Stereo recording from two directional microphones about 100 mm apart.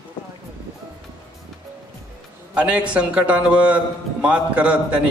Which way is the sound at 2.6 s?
10° right (ahead or behind).